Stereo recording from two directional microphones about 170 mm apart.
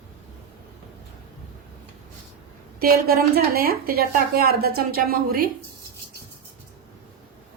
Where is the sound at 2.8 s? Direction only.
65° right (ahead or behind).